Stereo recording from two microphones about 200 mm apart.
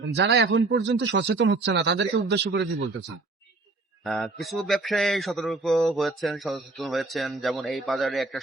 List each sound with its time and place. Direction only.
0.1 s speech: 60° right (ahead or behind)
4.0 s a man's voice: centre (ahead or behind)